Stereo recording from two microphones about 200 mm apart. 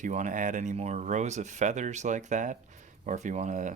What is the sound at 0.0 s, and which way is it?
Speech, 40° right (ahead or behind).